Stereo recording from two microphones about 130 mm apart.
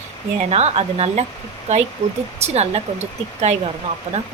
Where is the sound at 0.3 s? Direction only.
55° right (ahead or behind).